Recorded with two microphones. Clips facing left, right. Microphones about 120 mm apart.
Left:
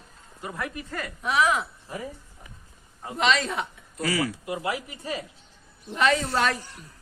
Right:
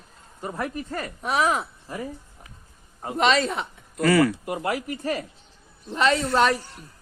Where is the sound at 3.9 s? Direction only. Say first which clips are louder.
Right 8 dB; 60° right (ahead or behind).